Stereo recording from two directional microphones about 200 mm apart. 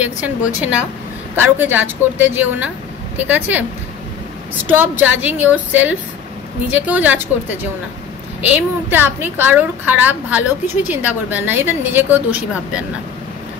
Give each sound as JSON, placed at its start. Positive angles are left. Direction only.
{"t": 0.0, "sound": "a woman's voice", "side_deg": -5}
{"t": 4.6, "sound": "a woman's voice", "side_deg": -10}